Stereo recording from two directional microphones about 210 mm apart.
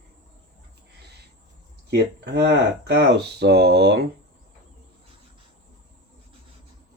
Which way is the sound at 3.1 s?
50° right (ahead or behind).